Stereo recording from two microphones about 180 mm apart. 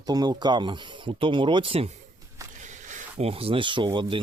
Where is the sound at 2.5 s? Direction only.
45° right (ahead or behind); by 4.2 s 25° right (ahead or behind).